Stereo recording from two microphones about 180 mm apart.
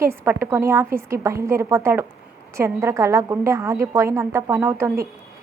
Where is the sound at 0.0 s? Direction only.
15° right (ahead or behind).